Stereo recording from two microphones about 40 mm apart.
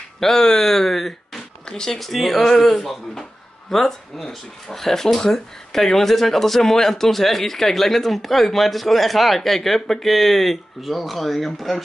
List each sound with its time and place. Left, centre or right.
0.2 s speech: centre
1.7 s speech: centre
2.0 s speech: centre